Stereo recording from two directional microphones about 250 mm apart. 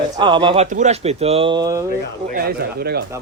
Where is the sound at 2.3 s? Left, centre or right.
Right.